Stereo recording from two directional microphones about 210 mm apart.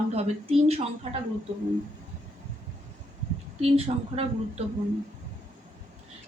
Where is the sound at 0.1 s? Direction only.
30° right (ahead or behind).